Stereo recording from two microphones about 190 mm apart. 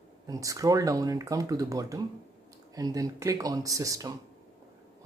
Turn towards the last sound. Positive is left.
turn(degrees=-20)  # may be behind; listen again after turning